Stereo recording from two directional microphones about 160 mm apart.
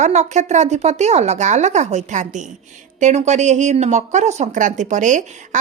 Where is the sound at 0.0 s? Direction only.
45° right (ahead or behind).